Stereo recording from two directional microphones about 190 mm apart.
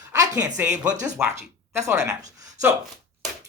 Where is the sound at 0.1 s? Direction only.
20° right (ahead or behind).